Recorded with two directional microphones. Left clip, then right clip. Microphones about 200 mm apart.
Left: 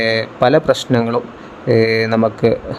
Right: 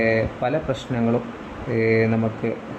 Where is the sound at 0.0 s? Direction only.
55° left (ahead or behind).